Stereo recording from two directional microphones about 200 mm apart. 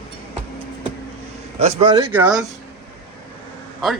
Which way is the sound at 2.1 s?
5° right (ahead or behind).